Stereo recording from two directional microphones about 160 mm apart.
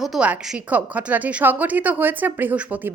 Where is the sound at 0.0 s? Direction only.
5° right (ahead or behind).